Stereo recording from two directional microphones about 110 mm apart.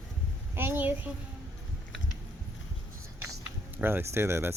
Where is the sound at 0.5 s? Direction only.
20° right (ahead or behind).